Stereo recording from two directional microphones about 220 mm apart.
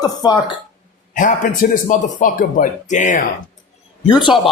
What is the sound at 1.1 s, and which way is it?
Speech, 35° left (ahead or behind).